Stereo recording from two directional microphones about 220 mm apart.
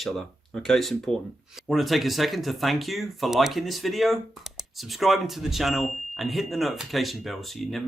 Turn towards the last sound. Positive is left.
turn(degrees=0)  # may be behind; listen again after turning